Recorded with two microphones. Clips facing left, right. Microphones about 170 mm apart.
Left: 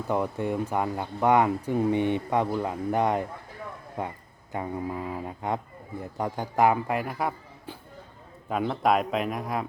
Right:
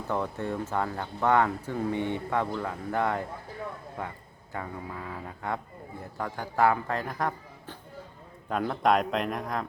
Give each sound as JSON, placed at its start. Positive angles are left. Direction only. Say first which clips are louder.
{"t": 0.1, "sound": "speech", "louder": "left 3 dB", "side_deg": 15}